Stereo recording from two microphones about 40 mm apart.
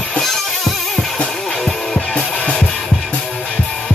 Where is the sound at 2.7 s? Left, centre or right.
Left.